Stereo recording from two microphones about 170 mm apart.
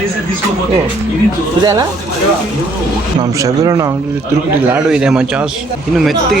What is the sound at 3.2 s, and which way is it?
Speech, 20° right (ahead or behind).